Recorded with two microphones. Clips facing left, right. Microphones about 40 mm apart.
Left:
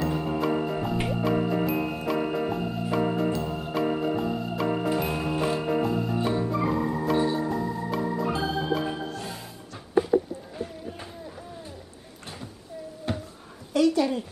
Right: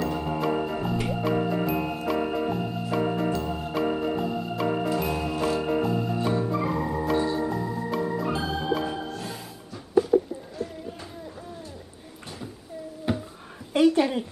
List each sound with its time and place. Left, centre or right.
0.0 s organ: centre
1.0 s music: centre
4.8 s music: centre
5.6 s music: centre
6.1 s organ: centre
13.1 s a sound: centre
13.7 s a sound: right